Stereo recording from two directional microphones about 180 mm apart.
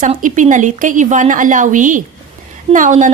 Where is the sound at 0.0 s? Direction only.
45° right (ahead or behind).